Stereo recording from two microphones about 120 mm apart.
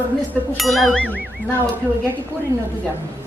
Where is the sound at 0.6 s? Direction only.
Centre (ahead or behind).